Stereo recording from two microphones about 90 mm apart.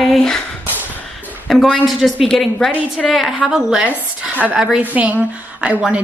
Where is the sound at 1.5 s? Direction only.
5° left (ahead or behind).